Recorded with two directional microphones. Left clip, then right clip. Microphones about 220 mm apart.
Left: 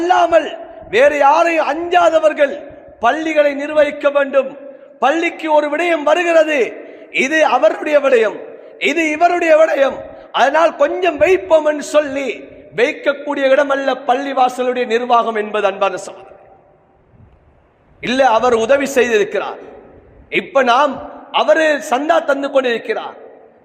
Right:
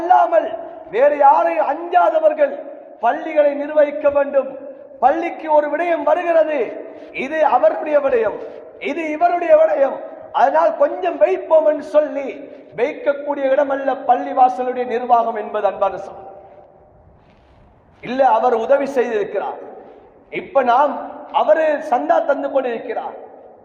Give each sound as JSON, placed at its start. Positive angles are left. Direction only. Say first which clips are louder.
{"t": 0.0, "sound": "a man's voice", "louder": "left 1 dB", "side_deg": 55}
{"t": 18.0, "sound": "a man's voice", "louder": "left 2 dB", "side_deg": 55}